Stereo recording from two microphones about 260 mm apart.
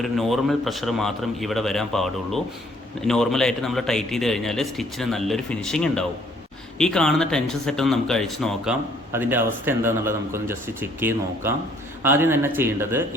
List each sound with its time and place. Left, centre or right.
0.0 s speech: centre